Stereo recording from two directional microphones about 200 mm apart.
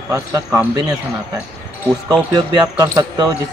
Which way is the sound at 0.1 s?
15° right (ahead or behind).